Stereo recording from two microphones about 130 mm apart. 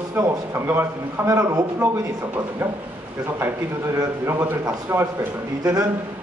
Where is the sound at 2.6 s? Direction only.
15° right (ahead or behind).